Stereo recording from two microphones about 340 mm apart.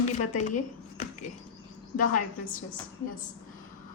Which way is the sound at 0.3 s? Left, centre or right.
Left.